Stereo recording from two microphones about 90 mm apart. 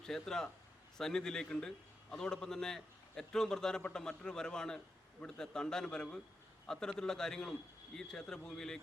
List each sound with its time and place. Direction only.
0.0 s a man's voice: 5° left (ahead or behind)